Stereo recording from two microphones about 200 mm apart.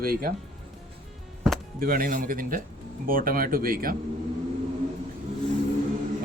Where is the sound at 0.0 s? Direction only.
45° right (ahead or behind).